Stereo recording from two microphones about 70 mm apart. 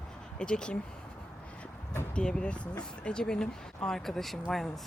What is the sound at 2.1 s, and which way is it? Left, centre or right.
Speech, centre.